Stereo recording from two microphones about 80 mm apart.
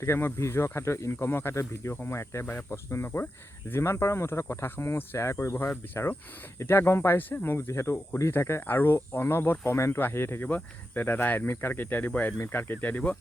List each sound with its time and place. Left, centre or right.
0.0 s speech: left